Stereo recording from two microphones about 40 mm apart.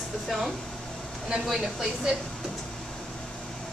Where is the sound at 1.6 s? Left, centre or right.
Centre.